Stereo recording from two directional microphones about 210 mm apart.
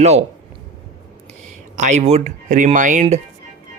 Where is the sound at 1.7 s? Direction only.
35° right (ahead or behind).